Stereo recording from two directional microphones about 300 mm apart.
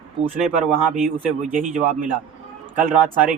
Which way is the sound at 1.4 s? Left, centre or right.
Right.